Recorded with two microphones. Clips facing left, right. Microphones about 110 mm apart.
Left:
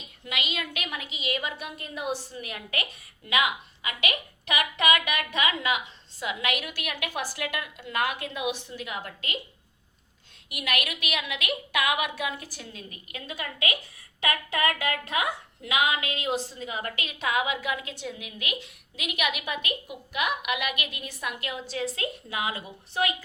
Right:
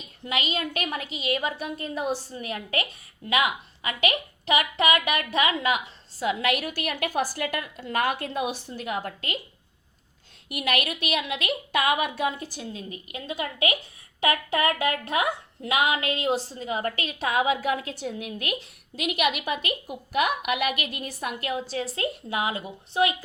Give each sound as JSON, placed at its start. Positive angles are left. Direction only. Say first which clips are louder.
{"t": 0.3, "sound": "a woman's voice", "louder": "right 5 dB", "side_deg": -40}
{"t": 10.5, "sound": "a woman's voice", "louder": "right 4 dB", "side_deg": -35}